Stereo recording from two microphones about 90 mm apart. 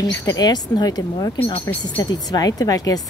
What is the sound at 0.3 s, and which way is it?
A woman's voice, 50° left (ahead or behind).